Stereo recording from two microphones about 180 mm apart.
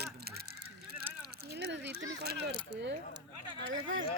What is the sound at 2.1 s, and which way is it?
Speech, 65° right (ahead or behind).